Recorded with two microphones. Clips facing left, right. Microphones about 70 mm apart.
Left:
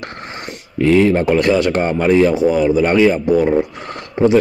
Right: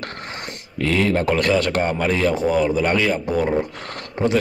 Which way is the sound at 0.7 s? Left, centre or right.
Left.